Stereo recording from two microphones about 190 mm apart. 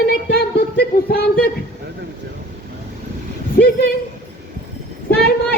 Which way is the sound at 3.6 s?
55° left (ahead or behind).